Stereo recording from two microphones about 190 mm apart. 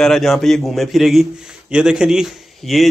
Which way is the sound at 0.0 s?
Centre (ahead or behind).